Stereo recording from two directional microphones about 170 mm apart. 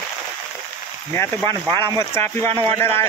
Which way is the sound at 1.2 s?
15° left (ahead or behind).